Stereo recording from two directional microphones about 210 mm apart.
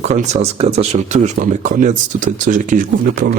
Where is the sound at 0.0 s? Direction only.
35° right (ahead or behind).